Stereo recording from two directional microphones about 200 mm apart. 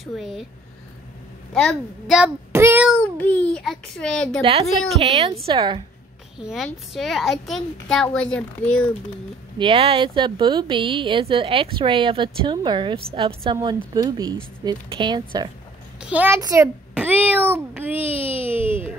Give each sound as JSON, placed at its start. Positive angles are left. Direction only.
{"t": 0.0, "sound": "a child's voice", "side_deg": 0}
{"t": 1.5, "sound": "a child's voice", "side_deg": 0}
{"t": 2.9, "sound": "a child's voice", "side_deg": 5}
{"t": 4.4, "sound": "speech", "side_deg": -30}
{"t": 6.3, "sound": "a child's voice", "side_deg": 0}
{"t": 9.6, "sound": "speech", "side_deg": -30}
{"t": 16.0, "sound": "a child's voice", "side_deg": -5}
{"t": 18.0, "sound": "a child's voice", "side_deg": 30}
{"t": 18.5, "sound": "speech", "side_deg": -10}